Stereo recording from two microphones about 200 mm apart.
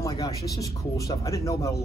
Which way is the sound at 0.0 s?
15° left (ahead or behind).